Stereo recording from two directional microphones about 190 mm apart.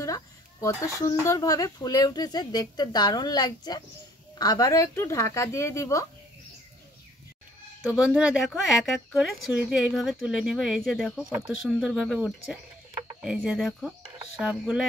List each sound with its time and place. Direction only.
0.0 s speech: 15° left (ahead or behind)
7.9 s speech: 5° right (ahead or behind)